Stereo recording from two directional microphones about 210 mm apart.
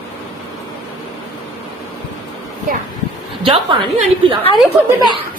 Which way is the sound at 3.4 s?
25° right (ahead or behind).